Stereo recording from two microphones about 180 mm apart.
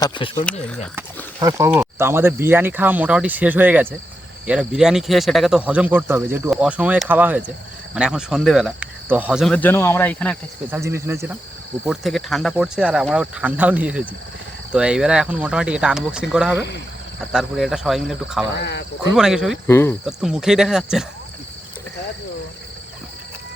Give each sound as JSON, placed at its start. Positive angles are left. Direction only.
{"t": 0.0, "sound": "speech", "side_deg": 25}
{"t": 0.9, "sound": "speech", "side_deg": -15}
{"t": 10.7, "sound": "speech", "side_deg": -15}
{"t": 11.9, "sound": "speech", "side_deg": 0}
{"t": 18.5, "sound": "speech", "side_deg": 65}
{"t": 19.1, "sound": "speech", "side_deg": -5}
{"t": 19.6, "sound": "cricket", "side_deg": 15}
{"t": 20.1, "sound": "speech", "side_deg": -5}